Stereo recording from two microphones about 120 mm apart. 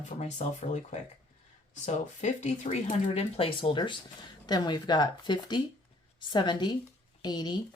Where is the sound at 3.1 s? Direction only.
55° left (ahead or behind).